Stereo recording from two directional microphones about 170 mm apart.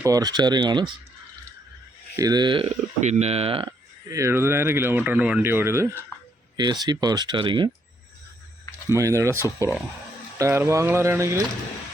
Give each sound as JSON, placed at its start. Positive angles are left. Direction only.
{"t": 0.0, "sound": "speech", "side_deg": -20}
{"t": 2.1, "sound": "speech", "side_deg": -20}
{"t": 8.9, "sound": "speech", "side_deg": -20}